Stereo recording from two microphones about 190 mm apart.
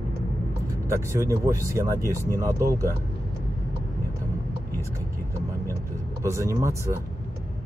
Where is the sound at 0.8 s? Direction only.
15° right (ahead or behind).